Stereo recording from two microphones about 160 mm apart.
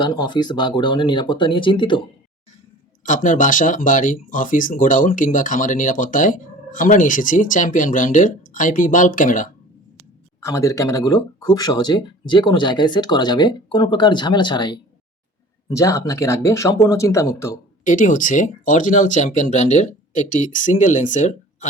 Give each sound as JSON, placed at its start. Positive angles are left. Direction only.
{"t": 0.0, "sound": "speech", "side_deg": 30}
{"t": 3.0, "sound": "speech", "side_deg": 55}
{"t": 10.4, "sound": "speech", "side_deg": 20}
{"t": 17.8, "sound": "speech", "side_deg": 55}